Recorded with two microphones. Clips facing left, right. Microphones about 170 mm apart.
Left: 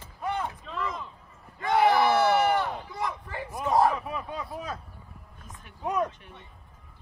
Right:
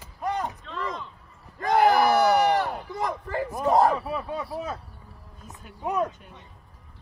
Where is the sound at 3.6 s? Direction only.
35° right (ahead or behind).